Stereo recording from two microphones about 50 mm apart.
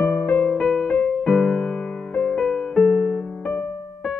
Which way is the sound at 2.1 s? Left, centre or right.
Left.